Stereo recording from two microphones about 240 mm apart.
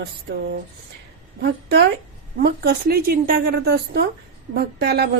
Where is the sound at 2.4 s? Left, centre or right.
Right.